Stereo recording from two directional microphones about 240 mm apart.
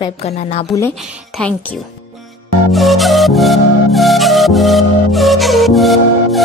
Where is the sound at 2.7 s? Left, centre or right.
Centre.